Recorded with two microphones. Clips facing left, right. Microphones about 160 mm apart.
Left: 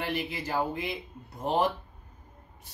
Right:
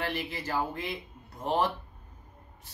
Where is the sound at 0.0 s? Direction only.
15° left (ahead or behind).